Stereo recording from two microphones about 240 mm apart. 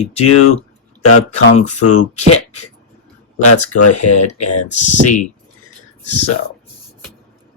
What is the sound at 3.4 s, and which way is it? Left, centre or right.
Speech, left.